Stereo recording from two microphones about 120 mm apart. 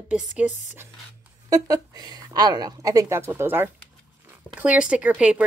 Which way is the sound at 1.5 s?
30° right (ahead or behind).